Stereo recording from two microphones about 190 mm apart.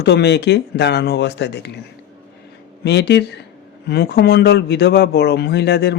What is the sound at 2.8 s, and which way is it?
Speech, 65° left (ahead or behind).